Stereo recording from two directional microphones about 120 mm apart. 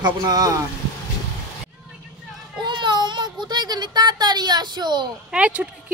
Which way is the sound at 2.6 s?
40° right (ahead or behind).